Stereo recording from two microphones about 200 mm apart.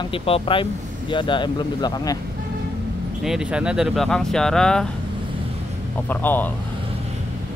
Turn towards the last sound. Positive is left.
turn(degrees=10)  # may be behind; listen again after turning